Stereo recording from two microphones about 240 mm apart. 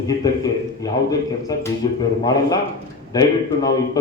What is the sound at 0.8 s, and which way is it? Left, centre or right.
A man's voice, centre.